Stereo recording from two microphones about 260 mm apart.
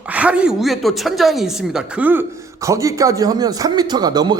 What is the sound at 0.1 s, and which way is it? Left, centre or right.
Speech, centre.